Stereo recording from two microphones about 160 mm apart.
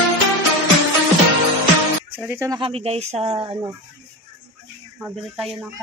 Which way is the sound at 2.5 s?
35° right (ahead or behind).